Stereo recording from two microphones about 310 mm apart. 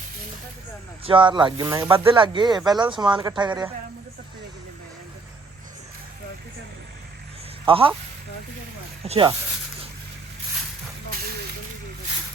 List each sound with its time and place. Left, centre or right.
1.0 s speech: centre
7.6 s speech: centre
9.0 s speech: centre